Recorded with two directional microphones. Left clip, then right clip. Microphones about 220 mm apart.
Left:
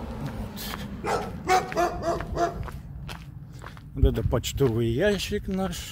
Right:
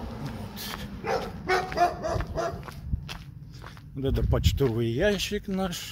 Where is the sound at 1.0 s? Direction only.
55° left (ahead or behind).